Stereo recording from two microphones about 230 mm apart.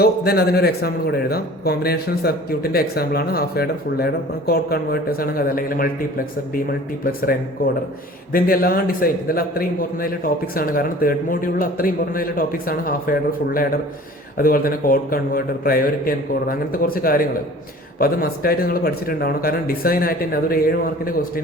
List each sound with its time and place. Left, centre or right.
0.0 s a man's voice: left